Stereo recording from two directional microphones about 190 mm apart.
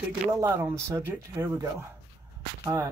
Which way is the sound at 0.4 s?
15° right (ahead or behind).